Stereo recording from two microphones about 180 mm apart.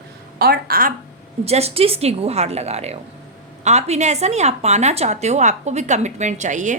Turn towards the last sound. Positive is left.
turn(degrees=-45)  # may be behind; listen again after turning